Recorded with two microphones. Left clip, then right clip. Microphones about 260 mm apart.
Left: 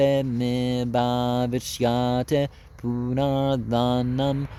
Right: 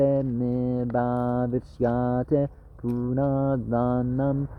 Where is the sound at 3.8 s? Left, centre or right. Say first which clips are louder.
Left 2 dB; left.